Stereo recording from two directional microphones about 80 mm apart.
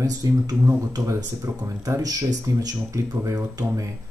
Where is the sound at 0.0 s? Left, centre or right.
Right.